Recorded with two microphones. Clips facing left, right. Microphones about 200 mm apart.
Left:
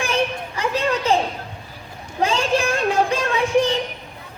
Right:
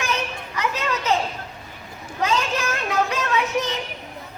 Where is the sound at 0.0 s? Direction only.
30° left (ahead or behind).